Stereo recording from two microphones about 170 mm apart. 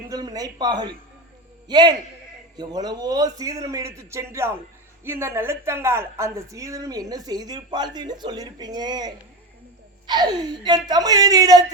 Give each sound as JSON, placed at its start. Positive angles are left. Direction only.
{"t": 0.1, "sound": "a man's voice", "side_deg": -20}